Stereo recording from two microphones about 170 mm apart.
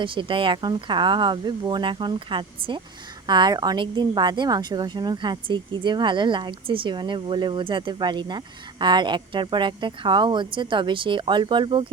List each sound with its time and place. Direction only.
0.0 s a woman's voice: 30° right (ahead or behind)